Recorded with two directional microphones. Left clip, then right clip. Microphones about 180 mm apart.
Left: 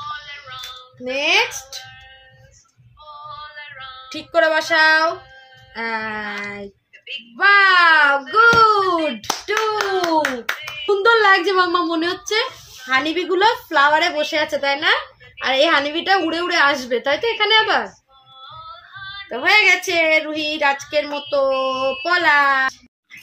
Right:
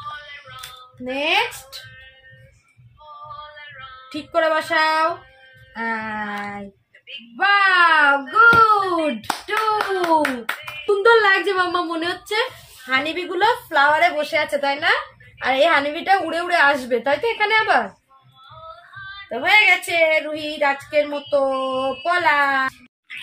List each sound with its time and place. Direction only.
1.0 s speech: 40° left (ahead or behind)
3.3 s a sound: 55° left (ahead or behind)
5.8 s speech: 45° left (ahead or behind)
9.3 s speech: 30° left (ahead or behind)
19.0 s speech: 50° left (ahead or behind)